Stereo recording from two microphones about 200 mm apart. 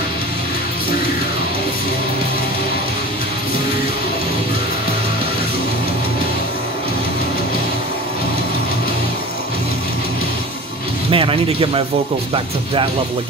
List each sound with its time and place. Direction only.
11.1 s speech: 25° right (ahead or behind)